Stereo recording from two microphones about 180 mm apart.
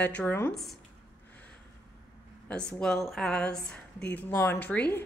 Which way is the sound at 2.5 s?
5° left (ahead or behind).